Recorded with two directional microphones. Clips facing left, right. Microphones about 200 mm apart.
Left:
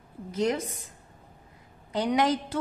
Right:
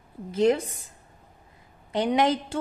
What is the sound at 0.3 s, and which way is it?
Speech, 30° right (ahead or behind).